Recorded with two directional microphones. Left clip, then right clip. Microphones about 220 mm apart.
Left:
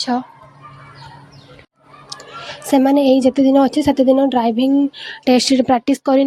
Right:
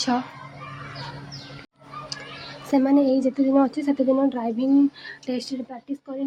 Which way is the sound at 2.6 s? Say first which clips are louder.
Left 7 dB; 30° left (ahead or behind).